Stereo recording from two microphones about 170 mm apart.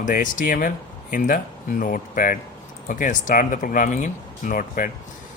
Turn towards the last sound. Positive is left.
turn(degrees=50)  # may be behind; listen again after turning